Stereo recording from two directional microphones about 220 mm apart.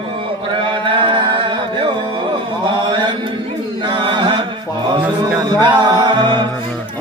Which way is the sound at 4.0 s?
20° right (ahead or behind).